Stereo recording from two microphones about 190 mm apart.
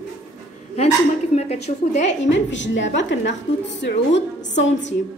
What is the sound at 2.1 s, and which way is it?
A woman's voice, 70° left (ahead or behind).